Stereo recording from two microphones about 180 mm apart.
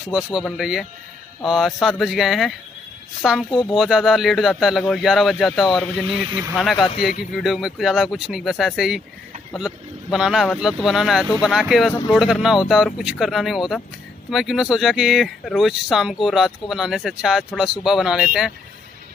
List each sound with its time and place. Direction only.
0.1 s speech: centre (ahead or behind)
11.9 s speech: 25° left (ahead or behind)
12.2 s speech: centre (ahead or behind)